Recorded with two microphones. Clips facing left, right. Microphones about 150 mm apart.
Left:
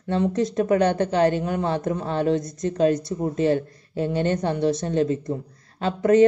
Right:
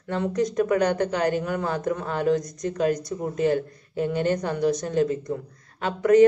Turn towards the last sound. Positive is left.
turn(degrees=30)  # may be behind; listen again after turning